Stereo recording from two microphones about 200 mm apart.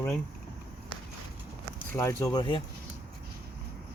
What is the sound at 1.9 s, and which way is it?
Speech, 15° left (ahead or behind).